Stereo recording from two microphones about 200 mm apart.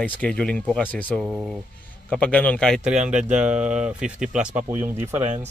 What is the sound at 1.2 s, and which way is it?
Speech, 5° right (ahead or behind).